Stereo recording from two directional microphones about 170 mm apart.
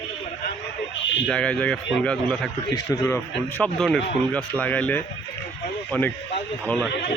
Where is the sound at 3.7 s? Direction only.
Centre (ahead or behind).